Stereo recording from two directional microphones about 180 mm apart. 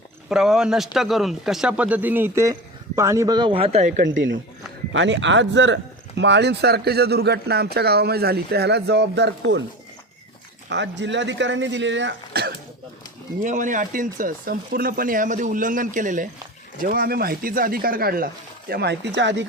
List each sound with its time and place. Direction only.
0.3 s speech: 5° right (ahead or behind); by 4.2 s 45° right (ahead or behind)
4.9 s speech: 90° right
10.7 s speech: 80° right; by 12.5 s 60° right (ahead or behind)
13.4 s speech: 45° right (ahead or behind)
18.7 s speech: 65° right (ahead or behind); by 19.5 s 80° right